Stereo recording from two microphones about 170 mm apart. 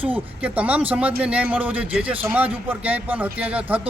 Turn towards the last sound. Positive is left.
turn(degrees=-10)  # may be behind; listen again after turning